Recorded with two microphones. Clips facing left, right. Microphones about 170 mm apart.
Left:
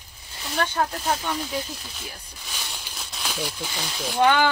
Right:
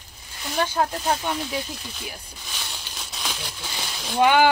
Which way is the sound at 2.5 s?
5° left (ahead or behind).